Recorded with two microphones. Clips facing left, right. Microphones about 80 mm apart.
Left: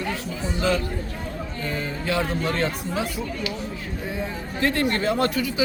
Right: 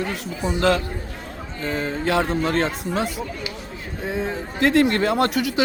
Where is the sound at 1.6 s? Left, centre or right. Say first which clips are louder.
Right 5 dB; right.